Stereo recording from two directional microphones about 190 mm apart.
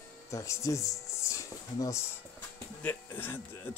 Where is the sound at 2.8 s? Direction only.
10° left (ahead or behind).